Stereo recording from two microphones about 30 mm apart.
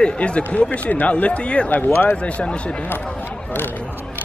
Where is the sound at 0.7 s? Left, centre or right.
Left.